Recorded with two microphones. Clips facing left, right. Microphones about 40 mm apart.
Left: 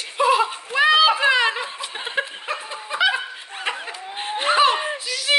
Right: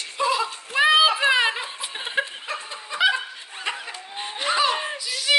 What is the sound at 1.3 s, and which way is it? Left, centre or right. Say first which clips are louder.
Snicker: left 2 dB; centre.